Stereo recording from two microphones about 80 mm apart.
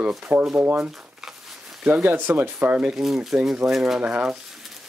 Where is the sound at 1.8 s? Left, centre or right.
Right.